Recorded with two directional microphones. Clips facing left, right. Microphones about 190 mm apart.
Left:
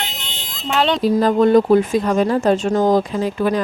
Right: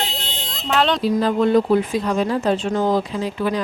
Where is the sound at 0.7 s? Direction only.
Centre (ahead or behind).